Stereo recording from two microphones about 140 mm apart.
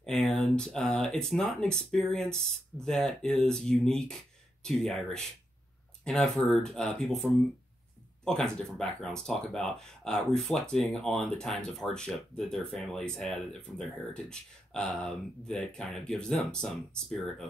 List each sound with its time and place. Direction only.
0.4 s speech: 5° left (ahead or behind)